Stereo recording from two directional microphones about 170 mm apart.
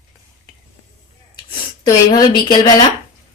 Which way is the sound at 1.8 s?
25° left (ahead or behind).